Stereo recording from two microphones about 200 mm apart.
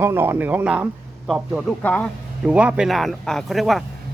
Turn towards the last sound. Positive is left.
turn(degrees=0)  # may be behind; listen again after turning